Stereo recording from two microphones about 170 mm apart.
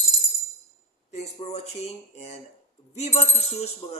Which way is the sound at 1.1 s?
40° left (ahead or behind).